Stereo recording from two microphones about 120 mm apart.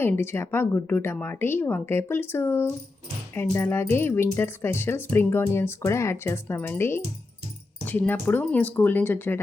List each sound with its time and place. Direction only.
0.0 s speech: 20° left (ahead or behind)